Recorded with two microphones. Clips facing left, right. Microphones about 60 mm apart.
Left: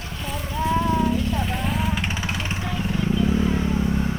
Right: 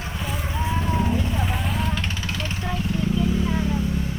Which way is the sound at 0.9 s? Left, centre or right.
Right.